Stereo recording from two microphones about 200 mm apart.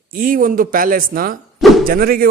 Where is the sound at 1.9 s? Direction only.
45° right (ahead or behind).